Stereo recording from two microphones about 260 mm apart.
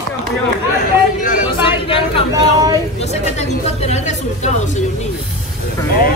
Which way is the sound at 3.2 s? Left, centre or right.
Left.